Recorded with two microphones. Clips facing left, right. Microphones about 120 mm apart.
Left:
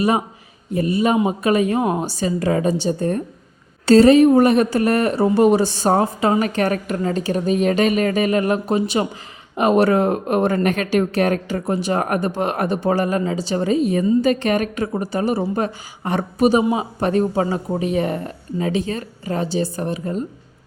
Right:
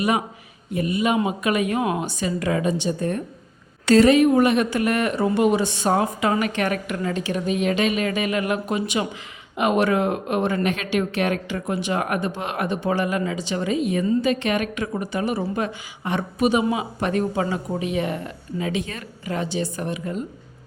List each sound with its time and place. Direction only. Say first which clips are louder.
0.7 s a woman's voice: left 4 dB; 35° left (ahead or behind)